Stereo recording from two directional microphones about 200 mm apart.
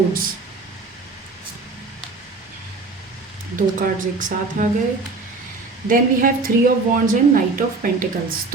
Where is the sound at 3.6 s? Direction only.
40° right (ahead or behind).